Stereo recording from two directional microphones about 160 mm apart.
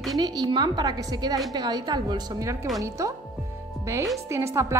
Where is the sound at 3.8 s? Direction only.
15° right (ahead or behind).